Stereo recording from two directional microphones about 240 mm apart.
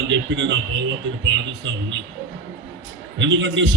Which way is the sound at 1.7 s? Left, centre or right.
Right.